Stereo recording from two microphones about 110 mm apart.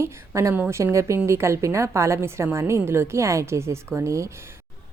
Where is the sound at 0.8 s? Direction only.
25° right (ahead or behind).